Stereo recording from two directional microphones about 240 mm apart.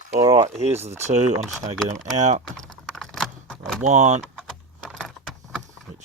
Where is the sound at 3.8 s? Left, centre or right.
Right.